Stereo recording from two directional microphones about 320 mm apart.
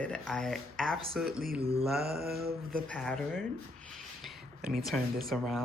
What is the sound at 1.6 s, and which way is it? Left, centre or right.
Mantra, centre.